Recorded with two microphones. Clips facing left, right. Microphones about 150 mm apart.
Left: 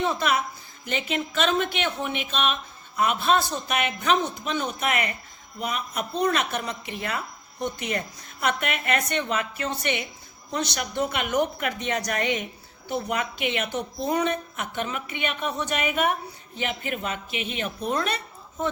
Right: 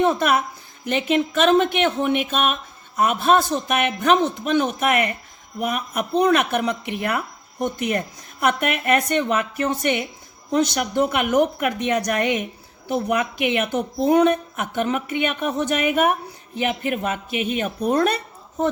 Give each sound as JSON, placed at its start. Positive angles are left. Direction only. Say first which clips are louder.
{"t": 0.0, "sound": "speech", "louder": "right 6 dB", "side_deg": -50}